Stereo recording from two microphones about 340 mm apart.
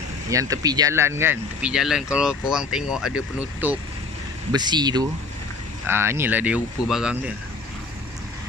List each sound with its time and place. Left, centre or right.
0.3 s speech: centre